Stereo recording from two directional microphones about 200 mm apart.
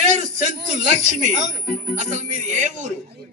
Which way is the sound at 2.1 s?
35° right (ahead or behind).